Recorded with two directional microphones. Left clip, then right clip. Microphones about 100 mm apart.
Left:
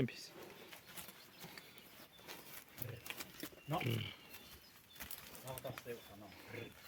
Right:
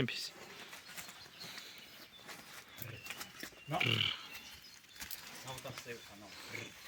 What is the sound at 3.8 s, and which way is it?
Speech, 15° left (ahead or behind).